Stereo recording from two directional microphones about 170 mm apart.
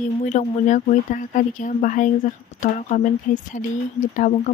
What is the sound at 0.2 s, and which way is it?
Speech, 45° left (ahead or behind).